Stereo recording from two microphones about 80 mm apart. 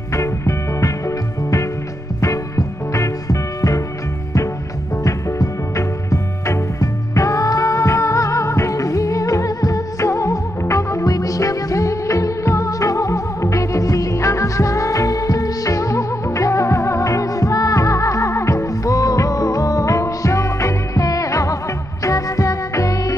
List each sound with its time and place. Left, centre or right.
0.1 s music: left
5.0 s music: left